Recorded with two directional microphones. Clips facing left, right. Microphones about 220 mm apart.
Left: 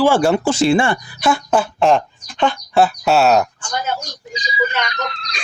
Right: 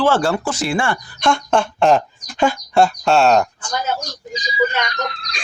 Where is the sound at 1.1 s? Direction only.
5° left (ahead or behind).